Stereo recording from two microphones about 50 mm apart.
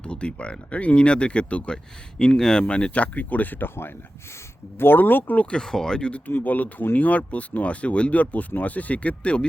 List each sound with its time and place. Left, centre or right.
0.0 s speech: left
2.1 s speech: centre; by 3.7 s left
4.8 s speech: left
5.4 s speech: centre
6.1 s speech: left